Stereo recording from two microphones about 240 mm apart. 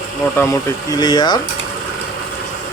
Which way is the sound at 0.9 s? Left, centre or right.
Centre.